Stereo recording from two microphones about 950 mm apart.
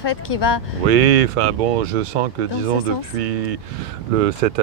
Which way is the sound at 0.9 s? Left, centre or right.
Right.